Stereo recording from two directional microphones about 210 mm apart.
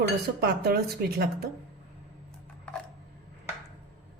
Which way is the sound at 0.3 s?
50° right (ahead or behind).